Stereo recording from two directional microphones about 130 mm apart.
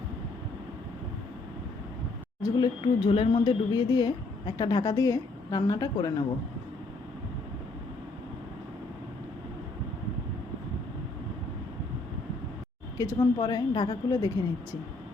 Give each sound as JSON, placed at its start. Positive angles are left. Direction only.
{"t": 2.4, "sound": "speech", "side_deg": 35}
{"t": 13.0, "sound": "a woman's voice", "side_deg": 25}